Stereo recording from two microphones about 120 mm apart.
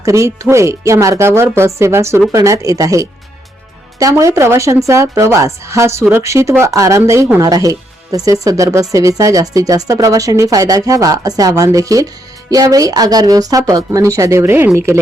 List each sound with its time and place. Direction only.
0.0 s speech: 25° right (ahead or behind)
4.1 s speech: 25° right (ahead or behind)